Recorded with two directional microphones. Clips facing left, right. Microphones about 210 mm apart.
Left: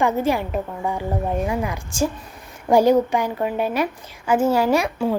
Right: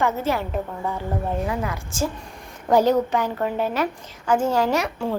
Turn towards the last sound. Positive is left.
turn(degrees=10)  # may be behind; listen again after turning